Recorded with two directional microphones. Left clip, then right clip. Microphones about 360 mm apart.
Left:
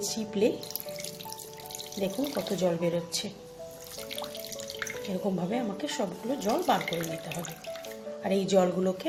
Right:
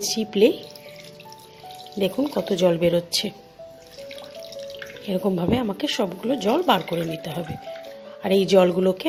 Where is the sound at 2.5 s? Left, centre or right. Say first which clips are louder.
Right 10 dB; right.